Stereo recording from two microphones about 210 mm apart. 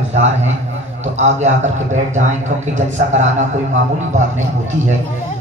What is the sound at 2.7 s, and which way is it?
Speech, 35° right (ahead or behind).